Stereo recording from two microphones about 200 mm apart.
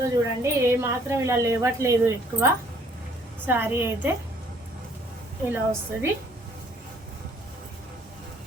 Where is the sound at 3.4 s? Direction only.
10° right (ahead or behind).